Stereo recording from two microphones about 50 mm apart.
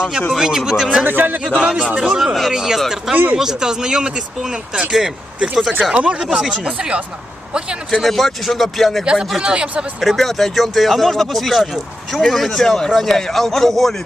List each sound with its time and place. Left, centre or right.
0.0 s speech: centre
1.0 s speech: right
1.6 s speech: centre
5.9 s speech: right
6.2 s speech: centre
6.7 s speech: right
7.9 s speech: centre
9.0 s speech: centre
10.0 s speech: centre